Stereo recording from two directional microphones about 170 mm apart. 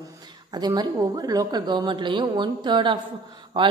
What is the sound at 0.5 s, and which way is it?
A woman's voice, 25° right (ahead or behind).